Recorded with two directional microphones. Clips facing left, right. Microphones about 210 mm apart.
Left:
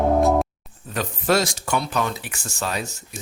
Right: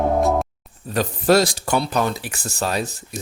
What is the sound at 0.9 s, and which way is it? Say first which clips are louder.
Speech: right 5 dB; 35° right (ahead or behind).